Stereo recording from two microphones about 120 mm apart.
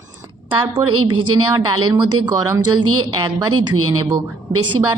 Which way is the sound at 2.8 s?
40° right (ahead or behind).